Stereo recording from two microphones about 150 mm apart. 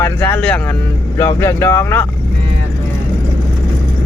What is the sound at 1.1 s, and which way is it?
Speech, 20° left (ahead or behind).